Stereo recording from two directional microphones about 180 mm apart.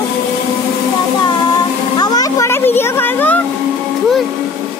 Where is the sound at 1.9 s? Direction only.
20° left (ahead or behind).